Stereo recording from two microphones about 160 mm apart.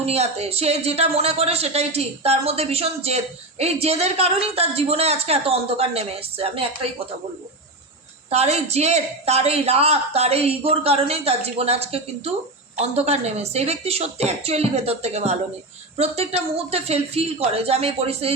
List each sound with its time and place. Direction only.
0.0 s a woman's voice: 40° right (ahead or behind)
8.3 s a woman's voice: 40° right (ahead or behind)